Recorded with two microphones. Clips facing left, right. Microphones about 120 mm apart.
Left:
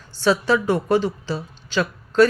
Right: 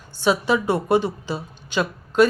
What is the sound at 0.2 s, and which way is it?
A woman's voice, 15° right (ahead or behind).